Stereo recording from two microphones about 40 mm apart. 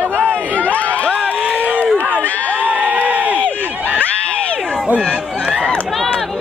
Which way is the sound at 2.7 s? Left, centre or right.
Right.